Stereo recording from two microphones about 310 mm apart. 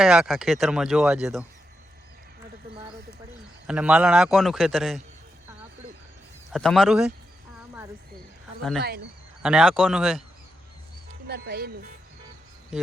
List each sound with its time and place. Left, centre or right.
0.0 s speech: centre
3.7 s speech: centre
6.5 s speech: centre
8.8 s speech: right
9.4 s speech: centre
11.3 s speech: right